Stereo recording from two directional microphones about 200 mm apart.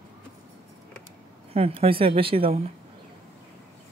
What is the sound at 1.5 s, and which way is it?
A woman's voice, 30° right (ahead or behind).